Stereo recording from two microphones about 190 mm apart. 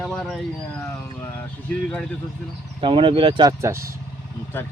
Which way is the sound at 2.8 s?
25° right (ahead or behind).